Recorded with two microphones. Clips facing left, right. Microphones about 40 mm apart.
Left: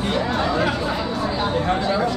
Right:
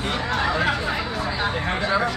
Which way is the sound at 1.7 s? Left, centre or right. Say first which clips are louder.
Even; right.